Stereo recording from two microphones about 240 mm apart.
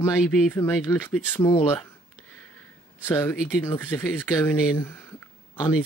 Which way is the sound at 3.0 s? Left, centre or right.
Centre.